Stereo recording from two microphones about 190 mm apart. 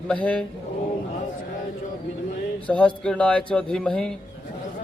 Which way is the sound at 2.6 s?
5° left (ahead or behind).